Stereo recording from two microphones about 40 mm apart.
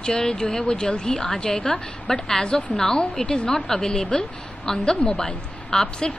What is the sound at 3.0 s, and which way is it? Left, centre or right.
Speech, left.